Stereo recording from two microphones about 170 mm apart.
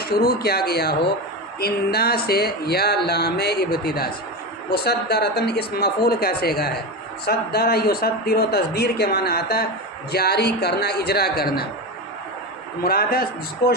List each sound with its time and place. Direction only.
0.0 s speech: 65° left (ahead or behind)
12.8 s a man's voice: 65° left (ahead or behind)